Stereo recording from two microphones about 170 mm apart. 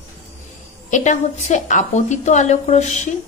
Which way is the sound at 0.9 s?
45° left (ahead or behind).